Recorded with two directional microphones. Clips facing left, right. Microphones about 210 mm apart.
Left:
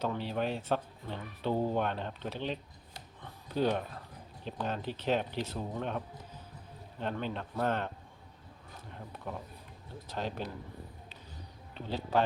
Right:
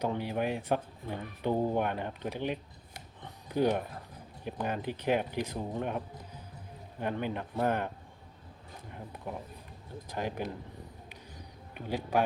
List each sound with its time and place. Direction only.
0.0 s speech: 15° right (ahead or behind)
7.0 s speech: 15° right (ahead or behind)
9.1 s speech: 15° right (ahead or behind)
11.7 s speech: 10° right (ahead or behind)